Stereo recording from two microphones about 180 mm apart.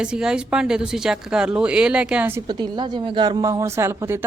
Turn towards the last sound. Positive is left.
turn(degrees=-15)  # may be behind; listen again after turning